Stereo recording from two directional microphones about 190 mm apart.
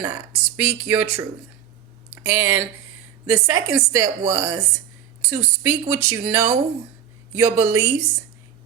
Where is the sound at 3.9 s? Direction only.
15° right (ahead or behind).